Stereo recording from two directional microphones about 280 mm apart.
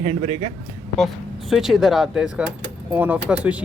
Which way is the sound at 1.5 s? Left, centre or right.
Centre.